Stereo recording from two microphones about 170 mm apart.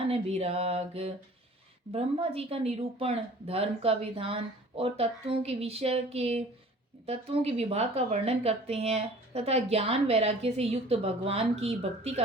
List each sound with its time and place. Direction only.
0.1 s a woman's voice: 40° right (ahead or behind)